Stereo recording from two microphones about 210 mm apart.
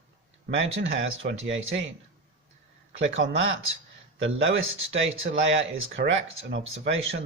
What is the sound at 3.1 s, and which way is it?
Speech, 65° right (ahead or behind).